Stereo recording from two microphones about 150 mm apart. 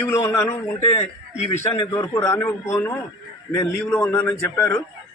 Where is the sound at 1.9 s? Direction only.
15° left (ahead or behind).